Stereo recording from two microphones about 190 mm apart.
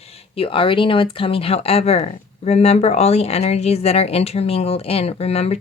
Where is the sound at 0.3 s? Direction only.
30° left (ahead or behind).